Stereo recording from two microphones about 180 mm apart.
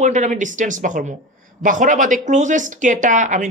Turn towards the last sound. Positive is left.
turn(degrees=-45)  # may be behind; listen again after turning